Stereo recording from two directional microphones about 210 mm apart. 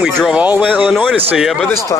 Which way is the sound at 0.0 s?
5° right (ahead or behind).